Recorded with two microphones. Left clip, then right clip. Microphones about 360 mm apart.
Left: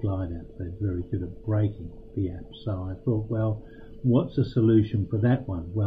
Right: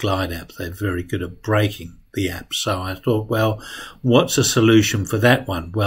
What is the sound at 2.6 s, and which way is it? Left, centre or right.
Speech, right.